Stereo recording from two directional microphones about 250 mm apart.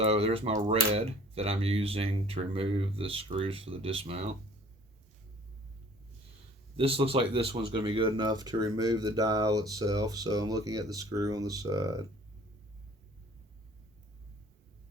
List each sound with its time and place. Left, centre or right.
0.0 s speech: right
6.7 s speech: right